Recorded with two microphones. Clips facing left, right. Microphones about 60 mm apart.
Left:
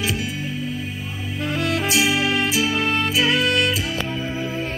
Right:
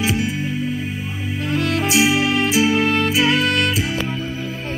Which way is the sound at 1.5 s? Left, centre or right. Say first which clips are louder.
Right 3 dB; centre.